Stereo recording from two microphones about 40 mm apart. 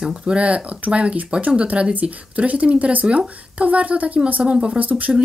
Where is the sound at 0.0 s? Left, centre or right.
Centre.